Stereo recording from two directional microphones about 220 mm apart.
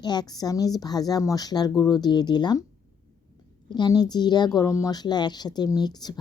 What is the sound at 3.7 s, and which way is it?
Speech, 20° left (ahead or behind).